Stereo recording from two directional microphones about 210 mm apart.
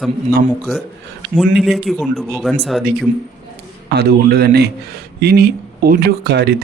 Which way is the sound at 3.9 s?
50° right (ahead or behind).